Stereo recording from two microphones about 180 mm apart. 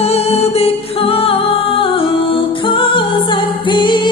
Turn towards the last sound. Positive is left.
turn(degrees=25)  # may be behind; listen again after turning